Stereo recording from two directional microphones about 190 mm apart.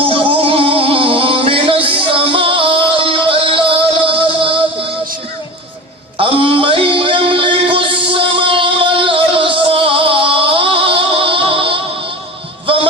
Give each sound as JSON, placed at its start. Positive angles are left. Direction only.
{"t": 0.1, "sound": "music", "side_deg": -30}
{"t": 6.1, "sound": "a sound", "side_deg": -30}
{"t": 12.6, "sound": "music", "side_deg": -30}